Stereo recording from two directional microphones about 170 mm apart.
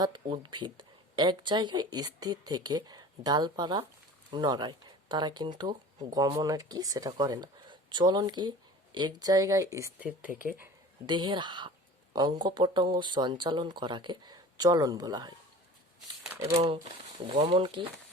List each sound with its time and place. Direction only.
0.0 s speech: 30° right (ahead or behind); by 10.3 s 10° right (ahead or behind)
11.1 s speech: 25° right (ahead or behind)
17.2 s speech: 30° right (ahead or behind)